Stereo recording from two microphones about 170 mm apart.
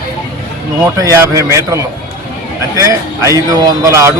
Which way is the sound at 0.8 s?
15° right (ahead or behind).